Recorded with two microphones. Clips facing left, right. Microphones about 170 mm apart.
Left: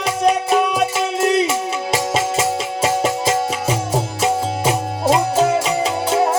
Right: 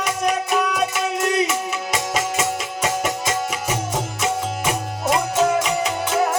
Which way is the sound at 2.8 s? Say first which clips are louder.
Left 5 dB; 30° left (ahead or behind).